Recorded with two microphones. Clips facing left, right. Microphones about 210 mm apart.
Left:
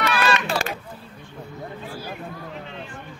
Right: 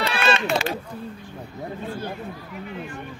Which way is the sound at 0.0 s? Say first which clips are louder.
Even; 25° right (ahead or behind).